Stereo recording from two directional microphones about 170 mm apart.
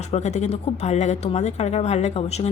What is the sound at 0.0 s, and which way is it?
Speech, 40° left (ahead or behind).